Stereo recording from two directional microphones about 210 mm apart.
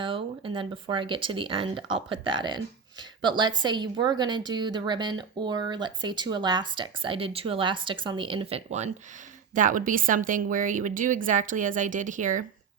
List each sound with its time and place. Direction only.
0.0 s a woman's voice: 25° right (ahead or behind)